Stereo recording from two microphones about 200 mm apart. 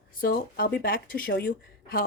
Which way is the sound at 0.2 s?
45° left (ahead or behind).